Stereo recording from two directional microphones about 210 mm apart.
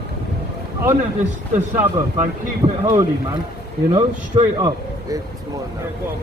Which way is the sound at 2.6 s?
20° right (ahead or behind).